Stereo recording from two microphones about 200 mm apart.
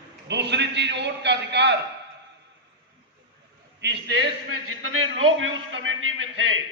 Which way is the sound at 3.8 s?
60° right (ahead or behind).